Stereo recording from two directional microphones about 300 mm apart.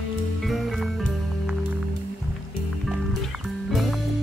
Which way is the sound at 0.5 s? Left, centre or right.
Centre.